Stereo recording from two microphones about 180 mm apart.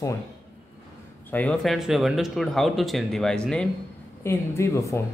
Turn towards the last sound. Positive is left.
turn(degrees=15)  # may be behind; listen again after turning